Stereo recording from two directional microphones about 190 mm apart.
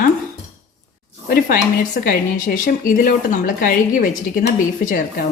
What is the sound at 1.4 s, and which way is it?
A woman's voice, 45° left (ahead or behind).